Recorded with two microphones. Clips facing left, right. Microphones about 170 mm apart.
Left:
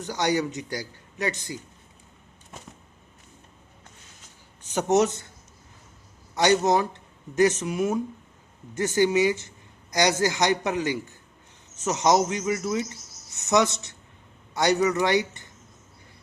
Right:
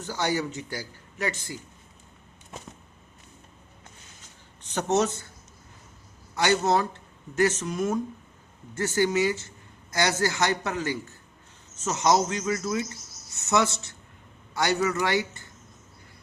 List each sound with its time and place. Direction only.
0.0 s a man's voice: 15° left (ahead or behind)
4.7 s speech: 10° left (ahead or behind)
6.3 s a man's voice: 20° left (ahead or behind)